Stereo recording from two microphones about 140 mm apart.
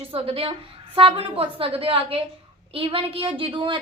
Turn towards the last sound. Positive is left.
turn(degrees=-40)  # may be behind; listen again after turning